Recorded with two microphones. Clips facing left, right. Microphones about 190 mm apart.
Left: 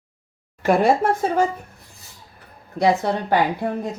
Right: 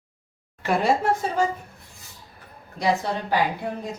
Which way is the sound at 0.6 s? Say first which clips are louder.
Left 4 dB; 55° left (ahead or behind).